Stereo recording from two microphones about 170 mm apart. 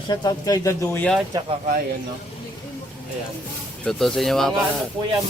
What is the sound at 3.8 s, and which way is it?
Speech, centre (ahead or behind).